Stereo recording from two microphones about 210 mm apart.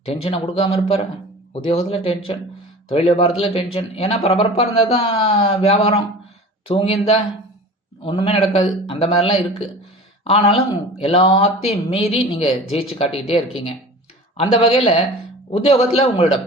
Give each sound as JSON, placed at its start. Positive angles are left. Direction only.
{"t": 0.0, "sound": "speech", "side_deg": 30}
{"t": 14.4, "sound": "speech", "side_deg": 25}